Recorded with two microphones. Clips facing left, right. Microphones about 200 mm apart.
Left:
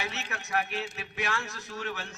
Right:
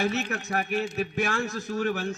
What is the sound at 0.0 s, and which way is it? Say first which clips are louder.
Mantra: right 10 dB; 55° right (ahead or behind).